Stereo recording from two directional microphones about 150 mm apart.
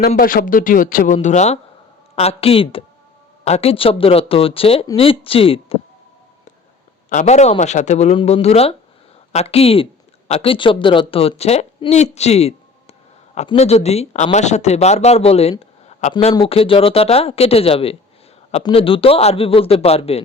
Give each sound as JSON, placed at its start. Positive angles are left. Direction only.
{"t": 0.2, "sound": "a man's voice", "side_deg": 70}
{"t": 7.1, "sound": "a man's voice", "side_deg": 55}